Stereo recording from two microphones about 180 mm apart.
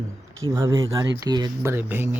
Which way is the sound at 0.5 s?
15° right (ahead or behind).